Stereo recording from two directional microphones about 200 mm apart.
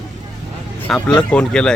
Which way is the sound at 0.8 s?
5° left (ahead or behind).